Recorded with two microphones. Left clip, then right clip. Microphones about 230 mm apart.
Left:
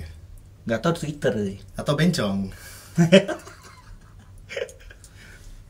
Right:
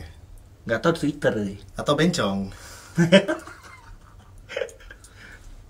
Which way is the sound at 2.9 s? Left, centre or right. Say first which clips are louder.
Even; centre.